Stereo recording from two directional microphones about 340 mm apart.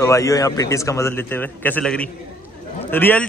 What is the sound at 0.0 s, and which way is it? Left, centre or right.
A man's voice, centre.